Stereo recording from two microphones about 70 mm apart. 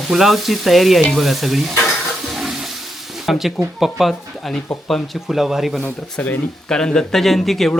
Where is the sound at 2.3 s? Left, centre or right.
Centre.